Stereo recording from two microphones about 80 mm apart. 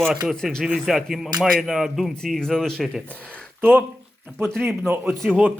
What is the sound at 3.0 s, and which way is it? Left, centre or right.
Speech, centre.